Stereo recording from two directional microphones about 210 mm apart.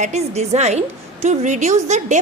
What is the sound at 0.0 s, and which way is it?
A woman's voice, 30° right (ahead or behind).